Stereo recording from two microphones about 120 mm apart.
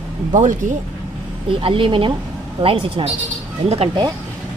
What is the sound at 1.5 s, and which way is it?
A woman's voice, 50° right (ahead or behind).